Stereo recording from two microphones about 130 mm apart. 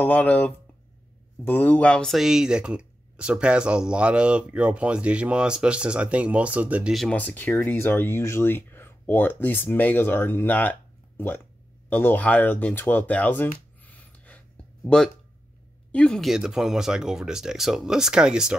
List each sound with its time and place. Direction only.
0.0 s speech: 10° left (ahead or behind)
7.2 s speech: 15° left (ahead or behind)
13.8 s gasp: 10° left (ahead or behind)
15.9 s speech: 5° left (ahead or behind)